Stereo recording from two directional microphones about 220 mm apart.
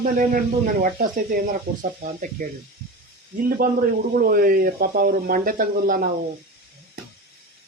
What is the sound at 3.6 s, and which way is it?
Speech, 40° right (ahead or behind).